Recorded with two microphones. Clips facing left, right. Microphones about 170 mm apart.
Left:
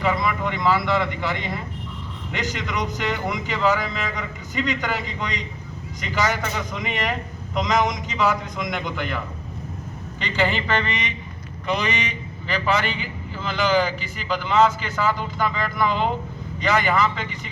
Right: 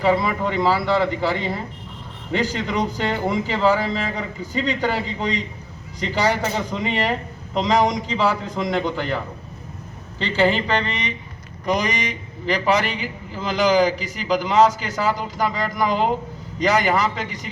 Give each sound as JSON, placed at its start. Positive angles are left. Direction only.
{"t": 0.0, "sound": "a man's voice", "side_deg": -35}